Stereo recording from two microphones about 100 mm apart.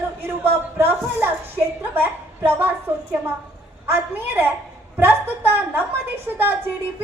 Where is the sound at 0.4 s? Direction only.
20° right (ahead or behind).